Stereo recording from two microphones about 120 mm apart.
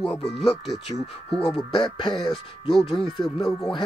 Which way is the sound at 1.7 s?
40° left (ahead or behind).